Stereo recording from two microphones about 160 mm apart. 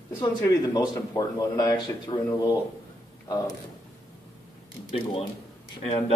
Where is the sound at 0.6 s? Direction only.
25° left (ahead or behind).